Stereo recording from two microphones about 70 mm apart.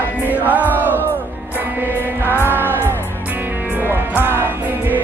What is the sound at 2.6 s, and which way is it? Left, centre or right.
Music, right.